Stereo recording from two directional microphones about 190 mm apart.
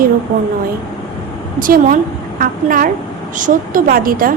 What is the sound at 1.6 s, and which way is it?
A woman's voice, 45° right (ahead or behind).